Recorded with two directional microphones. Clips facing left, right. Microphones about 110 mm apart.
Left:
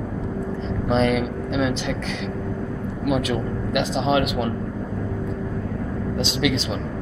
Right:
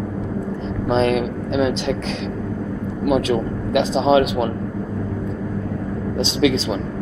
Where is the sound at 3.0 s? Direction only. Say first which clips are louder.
Right 4 dB; 30° right (ahead or behind).